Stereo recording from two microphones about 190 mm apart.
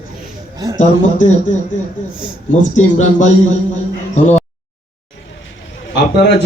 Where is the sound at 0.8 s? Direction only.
40° left (ahead or behind).